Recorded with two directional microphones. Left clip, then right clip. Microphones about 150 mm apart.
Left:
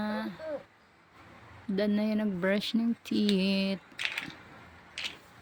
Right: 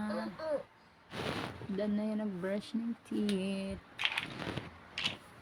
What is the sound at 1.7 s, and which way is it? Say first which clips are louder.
Speech: left 7 dB; 70° left (ahead or behind).